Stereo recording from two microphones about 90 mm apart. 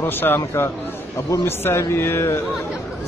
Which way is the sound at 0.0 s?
25° left (ahead or behind).